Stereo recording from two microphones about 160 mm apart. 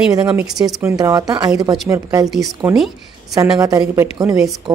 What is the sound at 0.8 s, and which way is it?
A woman's voice, 20° right (ahead or behind).